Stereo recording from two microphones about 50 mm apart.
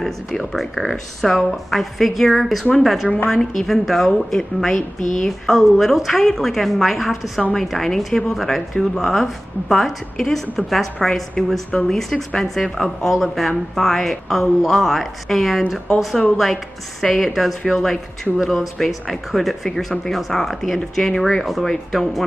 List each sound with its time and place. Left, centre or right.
0.0 s a woman's voice: centre
17.0 s speech: centre